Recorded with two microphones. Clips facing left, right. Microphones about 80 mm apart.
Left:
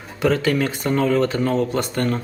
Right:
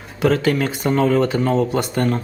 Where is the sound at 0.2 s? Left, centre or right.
Centre.